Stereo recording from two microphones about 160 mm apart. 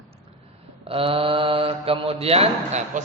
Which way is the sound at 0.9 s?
35° right (ahead or behind).